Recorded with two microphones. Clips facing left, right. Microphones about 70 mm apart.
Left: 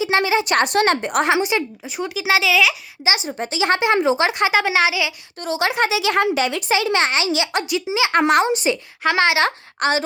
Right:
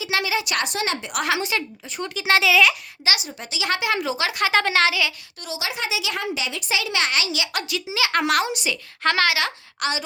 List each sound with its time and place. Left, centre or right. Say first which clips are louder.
0.0 s speech: left 6 dB; left
1.2 s speech: left 3 dB; left
2.0 s a child's voice: left 1 dB; centre
3.0 s speech: left 6 dB; left
4.5 s speech: left 2 dB; centre
5.4 s speech: left 9 dB; left